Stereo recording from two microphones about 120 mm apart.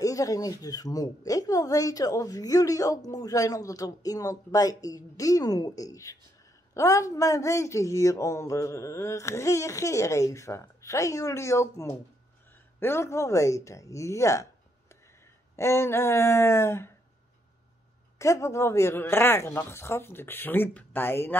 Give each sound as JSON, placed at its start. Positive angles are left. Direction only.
{"t": 0.0, "sound": "a woman's voice", "side_deg": 30}
{"t": 15.5, "sound": "a woman's voice", "side_deg": 25}
{"t": 18.2, "sound": "a woman's voice", "side_deg": 25}